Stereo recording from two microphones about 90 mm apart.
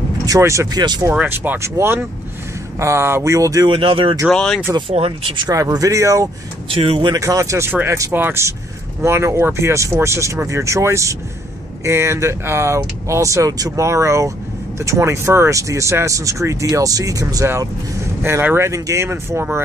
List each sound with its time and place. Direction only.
0.4 s speech: 35° right (ahead or behind)
0.7 s speech: 50° right (ahead or behind)
1.2 s speech: 20° right (ahead or behind); by 3.6 s 40° right (ahead or behind)
3.6 s speech: 75° right (ahead or behind)
4.3 s speech: 10° left (ahead or behind)
4.7 s speech: 85° right
5.5 s speech: 40° right (ahead or behind)
6.7 s speech: 90° right
7.2 s speech: 40° right (ahead or behind)
18.2 s speech: 25° right (ahead or behind)